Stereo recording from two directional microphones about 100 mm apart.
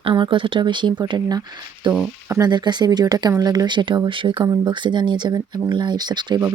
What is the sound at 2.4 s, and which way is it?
Speech, 45° right (ahead or behind).